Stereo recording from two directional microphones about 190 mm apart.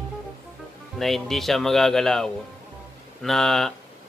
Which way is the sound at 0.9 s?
Centre (ahead or behind).